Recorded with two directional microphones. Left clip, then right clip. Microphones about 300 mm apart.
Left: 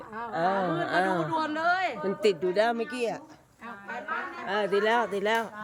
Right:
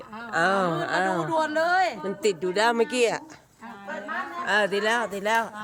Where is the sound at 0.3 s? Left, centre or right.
Centre.